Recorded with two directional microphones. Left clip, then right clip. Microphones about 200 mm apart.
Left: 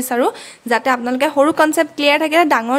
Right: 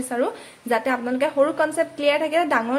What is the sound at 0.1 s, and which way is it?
A woman's voice, 30° left (ahead or behind).